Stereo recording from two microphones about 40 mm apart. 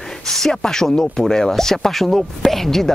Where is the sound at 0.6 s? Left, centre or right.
Centre.